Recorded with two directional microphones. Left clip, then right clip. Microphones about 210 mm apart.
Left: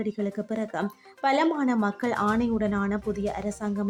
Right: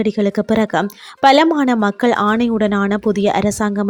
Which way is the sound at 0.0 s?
40° right (ahead or behind).